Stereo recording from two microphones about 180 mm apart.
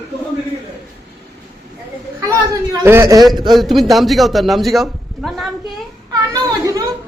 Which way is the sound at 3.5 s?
Centre (ahead or behind).